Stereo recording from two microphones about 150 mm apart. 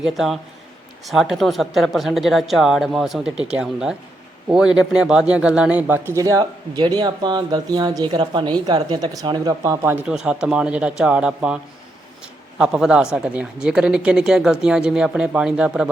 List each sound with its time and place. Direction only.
0.0 s speech: centre (ahead or behind)